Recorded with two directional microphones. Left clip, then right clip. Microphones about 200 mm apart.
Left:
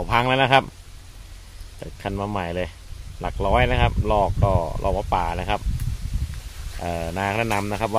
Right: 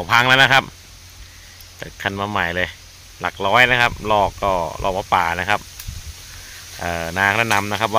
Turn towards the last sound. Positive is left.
turn(degrees=0)  # may be behind; listen again after turning